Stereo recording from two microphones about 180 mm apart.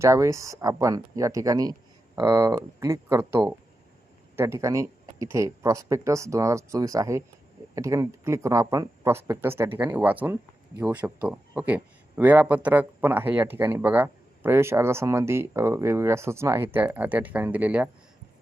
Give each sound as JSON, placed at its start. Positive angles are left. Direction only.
{"t": 0.0, "sound": "a man's voice", "side_deg": -15}